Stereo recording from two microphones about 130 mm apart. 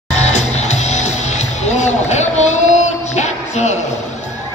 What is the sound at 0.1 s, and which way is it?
Music, 60° left (ahead or behind).